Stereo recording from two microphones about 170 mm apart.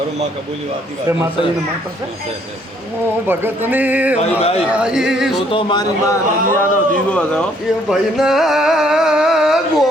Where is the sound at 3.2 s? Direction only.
10° right (ahead or behind).